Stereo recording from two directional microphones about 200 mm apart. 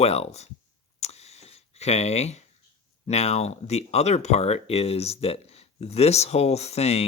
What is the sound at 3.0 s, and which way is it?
Speech, 30° left (ahead or behind).